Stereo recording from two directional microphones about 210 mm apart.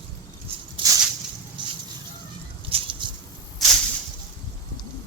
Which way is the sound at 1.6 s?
20° right (ahead or behind).